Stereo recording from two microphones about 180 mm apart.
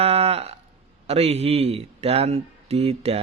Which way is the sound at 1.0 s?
35° right (ahead or behind).